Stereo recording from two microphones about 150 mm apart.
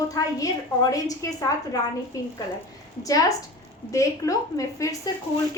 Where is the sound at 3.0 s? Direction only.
25° left (ahead or behind).